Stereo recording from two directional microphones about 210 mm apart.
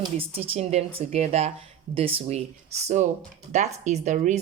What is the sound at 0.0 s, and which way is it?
Speech, 25° right (ahead or behind).